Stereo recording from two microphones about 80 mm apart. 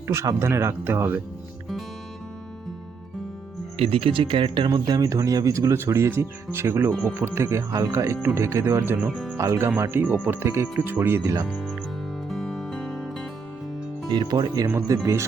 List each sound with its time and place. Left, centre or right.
0.1 s speech: right
4.1 s speech: right
4.7 s speech: right
8.8 s speech: right
9.0 s speech: centre
9.4 s speech: right
11.2 s speech: right
12.3 s music: centre
14.1 s speech: right
15.0 s speech: right